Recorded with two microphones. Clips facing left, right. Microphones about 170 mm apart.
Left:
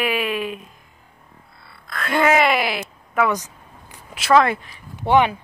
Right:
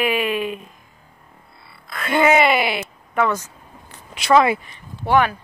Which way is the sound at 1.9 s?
Centre (ahead or behind).